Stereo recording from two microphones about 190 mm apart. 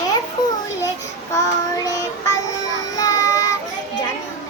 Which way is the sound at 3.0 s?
20° left (ahead or behind).